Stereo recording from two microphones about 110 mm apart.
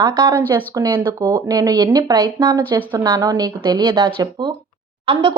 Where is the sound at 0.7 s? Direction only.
45° right (ahead or behind).